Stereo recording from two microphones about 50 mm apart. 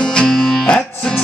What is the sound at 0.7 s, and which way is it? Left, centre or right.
Music, centre.